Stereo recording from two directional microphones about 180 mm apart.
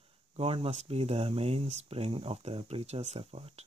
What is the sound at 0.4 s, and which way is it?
Speech, 35° right (ahead or behind).